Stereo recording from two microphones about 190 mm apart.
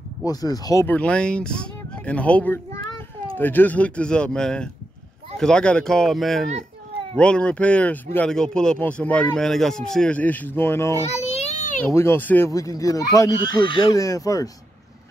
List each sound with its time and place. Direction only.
0.2 s speech: 20° left (ahead or behind)
11.1 s a sound: 35° left (ahead or behind)
11.9 s speech: 15° left (ahead or behind)